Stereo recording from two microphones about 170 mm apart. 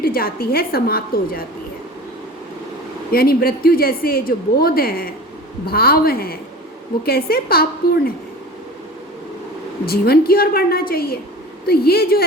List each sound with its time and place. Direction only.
0.0 s speech: 60° left (ahead or behind)
3.1 s speech: 60° left (ahead or behind)
9.8 s speech: 65° left (ahead or behind)